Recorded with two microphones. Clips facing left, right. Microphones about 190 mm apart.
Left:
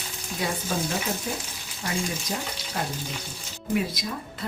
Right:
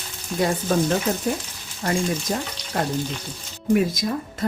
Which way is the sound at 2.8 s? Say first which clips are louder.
Right 8 dB; 50° right (ahead or behind).